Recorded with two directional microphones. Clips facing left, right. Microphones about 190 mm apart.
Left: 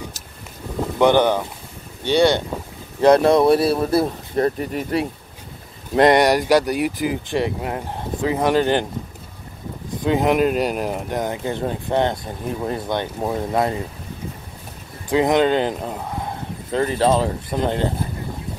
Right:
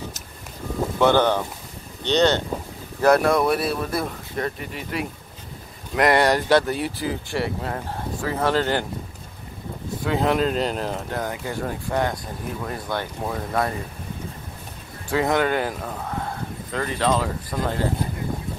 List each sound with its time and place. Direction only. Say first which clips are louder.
0.9 s speech: left 3 dB; 15° left (ahead or behind)
3.0 s speech: left 4 dB; 25° left (ahead or behind)
5.9 s speech: left 5 dB; 25° left (ahead or behind)
6.2 s speech: left 2 dB; 10° left (ahead or behind)
10.0 s speech: left 4 dB; 15° left (ahead or behind)
15.0 s speech: left 5 dB; 20° left (ahead or behind)